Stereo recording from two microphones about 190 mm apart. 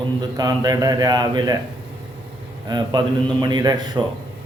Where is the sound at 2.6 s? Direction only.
20° right (ahead or behind).